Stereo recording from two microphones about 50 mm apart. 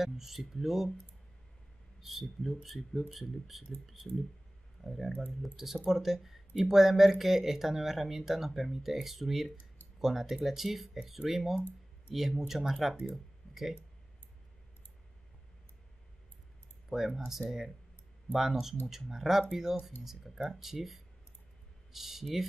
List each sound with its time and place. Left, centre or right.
0.0 s speech: centre
2.0 s speech: centre
13.1 s a sound: centre
16.9 s speech: centre